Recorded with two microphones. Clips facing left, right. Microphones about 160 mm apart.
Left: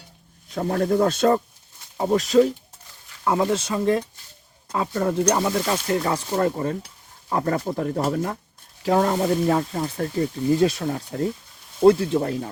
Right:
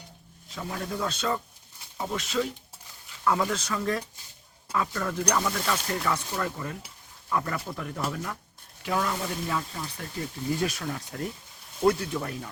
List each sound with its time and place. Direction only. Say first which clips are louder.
0.5 s speech: left 12 dB; 50° left (ahead or behind)
3.2 s speech: left 5 dB; 25° left (ahead or behind); by 10.2 s 45° left (ahead or behind)
10.6 s speech: left 9 dB; 30° left (ahead or behind)